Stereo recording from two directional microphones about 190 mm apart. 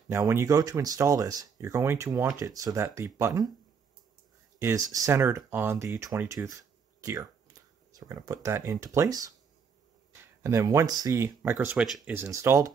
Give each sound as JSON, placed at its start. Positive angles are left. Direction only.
{"t": 0.1, "sound": "speech", "side_deg": -15}
{"t": 4.6, "sound": "speech", "side_deg": -15}